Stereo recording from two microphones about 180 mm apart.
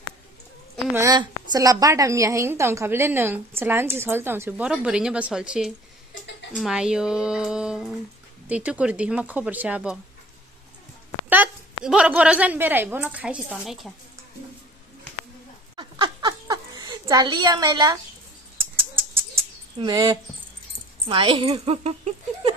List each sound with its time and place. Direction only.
0.9 s a woman's voice: 20° right (ahead or behind)
11.2 s a woman's voice: 10° right (ahead or behind)
15.7 s a sound: 25° right (ahead or behind)
19.8 s a woman's voice: 25° right (ahead or behind)